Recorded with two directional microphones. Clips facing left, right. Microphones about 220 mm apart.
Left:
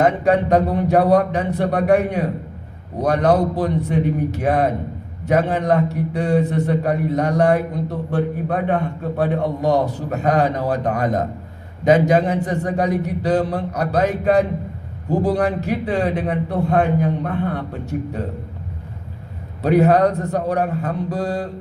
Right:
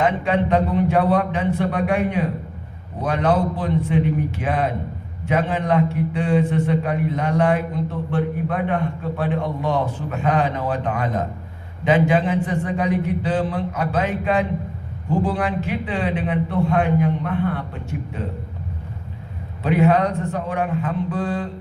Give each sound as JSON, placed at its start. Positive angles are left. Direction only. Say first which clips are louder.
{"t": 0.0, "sound": "a man's voice", "louder": "left 4 dB", "side_deg": 40}
{"t": 19.6, "sound": "a man's voice", "louder": "left 3 dB", "side_deg": 40}